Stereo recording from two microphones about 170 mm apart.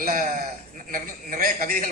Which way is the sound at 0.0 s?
55° right (ahead or behind).